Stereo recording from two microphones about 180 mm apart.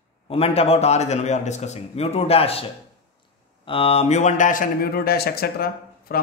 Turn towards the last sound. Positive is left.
turn(degrees=60)  # may be behind; listen again after turning